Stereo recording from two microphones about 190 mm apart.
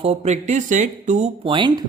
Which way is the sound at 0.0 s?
35° right (ahead or behind).